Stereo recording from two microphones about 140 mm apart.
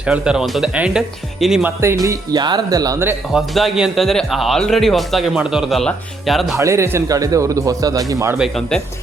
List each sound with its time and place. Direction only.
0.0 s speech: 5° right (ahead or behind)
1.8 s speech: 20° right (ahead or behind)
3.3 s speech: centre (ahead or behind)
6.6 s speech: 20° right (ahead or behind)
8.4 s speech: centre (ahead or behind)